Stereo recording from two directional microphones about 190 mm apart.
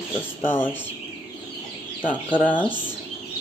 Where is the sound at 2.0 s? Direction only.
5° left (ahead or behind).